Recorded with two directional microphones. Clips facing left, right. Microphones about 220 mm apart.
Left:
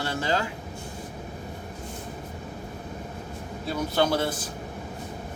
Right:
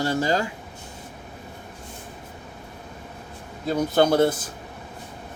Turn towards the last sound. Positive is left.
turn(degrees=-45)  # may be behind; listen again after turning